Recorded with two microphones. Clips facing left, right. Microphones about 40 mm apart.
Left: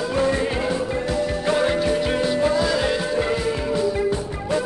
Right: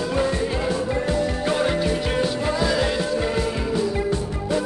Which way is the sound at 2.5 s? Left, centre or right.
Centre.